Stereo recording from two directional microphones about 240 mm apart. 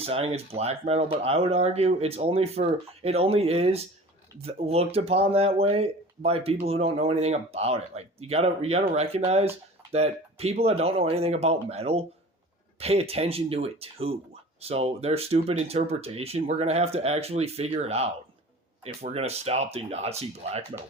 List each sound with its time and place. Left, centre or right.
0.0 s speech: right